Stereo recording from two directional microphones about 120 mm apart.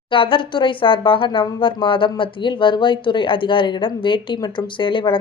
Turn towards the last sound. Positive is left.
turn(degrees=45)  # may be behind; listen again after turning